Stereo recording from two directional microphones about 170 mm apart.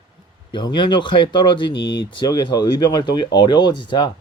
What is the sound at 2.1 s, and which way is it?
Speech, 25° left (ahead or behind).